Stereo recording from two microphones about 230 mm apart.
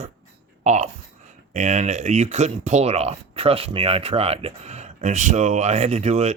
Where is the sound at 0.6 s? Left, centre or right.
Right.